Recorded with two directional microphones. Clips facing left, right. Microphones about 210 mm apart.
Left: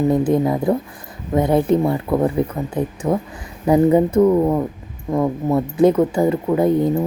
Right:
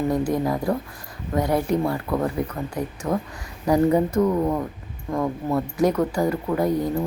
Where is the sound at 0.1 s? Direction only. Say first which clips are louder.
Left 6 dB; 25° left (ahead or behind).